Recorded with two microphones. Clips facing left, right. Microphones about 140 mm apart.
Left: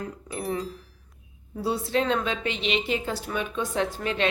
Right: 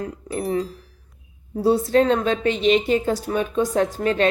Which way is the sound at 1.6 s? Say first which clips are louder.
Right 8 dB; 45° right (ahead or behind).